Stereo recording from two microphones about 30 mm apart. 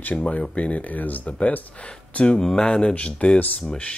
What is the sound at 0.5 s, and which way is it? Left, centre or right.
Speech, left.